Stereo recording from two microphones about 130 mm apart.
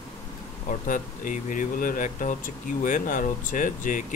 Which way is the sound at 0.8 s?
90° left.